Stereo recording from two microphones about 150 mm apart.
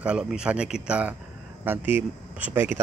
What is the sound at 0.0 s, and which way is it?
Speech, 5° right (ahead or behind).